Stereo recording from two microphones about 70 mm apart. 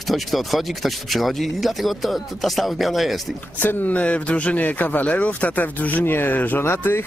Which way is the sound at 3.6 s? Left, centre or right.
Left.